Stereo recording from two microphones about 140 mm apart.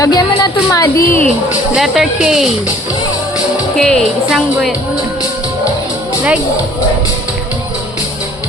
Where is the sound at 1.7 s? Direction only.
5° right (ahead or behind).